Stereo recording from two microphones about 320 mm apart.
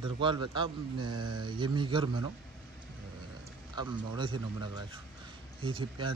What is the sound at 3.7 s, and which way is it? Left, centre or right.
Speech, centre.